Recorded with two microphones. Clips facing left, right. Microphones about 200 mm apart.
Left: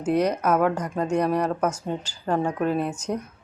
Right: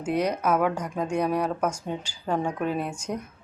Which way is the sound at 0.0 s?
10° right (ahead or behind).